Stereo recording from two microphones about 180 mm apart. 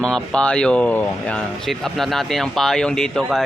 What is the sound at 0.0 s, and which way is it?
A man's voice, 5° left (ahead or behind).